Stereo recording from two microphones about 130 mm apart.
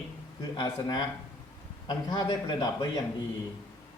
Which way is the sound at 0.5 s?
35° left (ahead or behind).